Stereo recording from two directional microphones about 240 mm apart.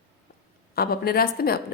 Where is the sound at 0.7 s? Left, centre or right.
Left.